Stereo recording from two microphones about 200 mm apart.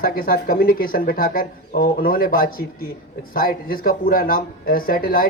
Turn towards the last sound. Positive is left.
turn(degrees=45)  # may be behind; listen again after turning